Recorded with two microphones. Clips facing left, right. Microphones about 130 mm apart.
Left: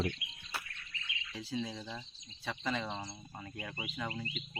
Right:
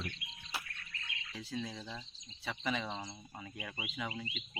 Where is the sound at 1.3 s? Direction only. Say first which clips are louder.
Left 3 dB; centre (ahead or behind).